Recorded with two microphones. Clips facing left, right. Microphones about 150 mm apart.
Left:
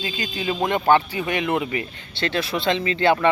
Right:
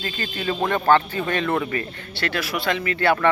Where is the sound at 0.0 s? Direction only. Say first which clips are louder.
Left 1 dB; 15° left (ahead or behind).